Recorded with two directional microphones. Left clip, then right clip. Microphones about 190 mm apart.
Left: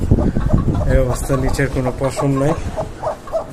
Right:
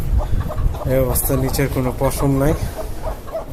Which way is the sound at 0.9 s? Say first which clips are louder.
Even; 10° right (ahead or behind).